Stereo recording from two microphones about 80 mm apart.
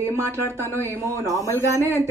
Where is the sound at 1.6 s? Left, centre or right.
Right.